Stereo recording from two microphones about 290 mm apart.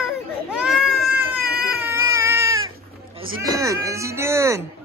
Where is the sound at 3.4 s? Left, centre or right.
Centre.